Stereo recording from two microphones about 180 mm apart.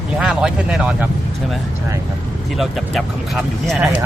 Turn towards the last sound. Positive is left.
turn(degrees=-5)  # may be behind; listen again after turning